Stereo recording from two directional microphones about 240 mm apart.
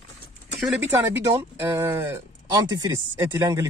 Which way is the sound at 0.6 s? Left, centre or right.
Centre.